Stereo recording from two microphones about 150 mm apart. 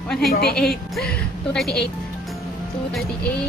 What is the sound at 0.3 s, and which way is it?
Speech, 90° left.